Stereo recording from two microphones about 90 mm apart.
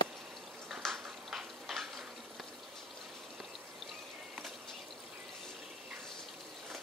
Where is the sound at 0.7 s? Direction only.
Centre (ahead or behind).